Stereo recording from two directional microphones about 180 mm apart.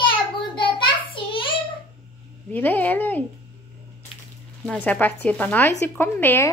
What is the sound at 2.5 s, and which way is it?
Speech, 10° left (ahead or behind).